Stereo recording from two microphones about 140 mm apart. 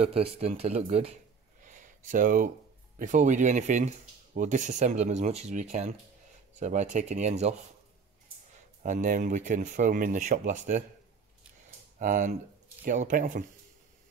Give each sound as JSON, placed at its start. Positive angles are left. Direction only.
{"t": 0.0, "sound": "speech", "side_deg": -45}
{"t": 1.6, "sound": "a sound", "side_deg": -65}
{"t": 3.0, "sound": "speech", "side_deg": -60}
{"t": 8.8, "sound": "speech", "side_deg": -70}
{"t": 12.0, "sound": "speech", "side_deg": -65}